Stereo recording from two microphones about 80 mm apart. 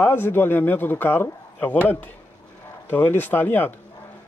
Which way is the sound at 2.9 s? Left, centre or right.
Left.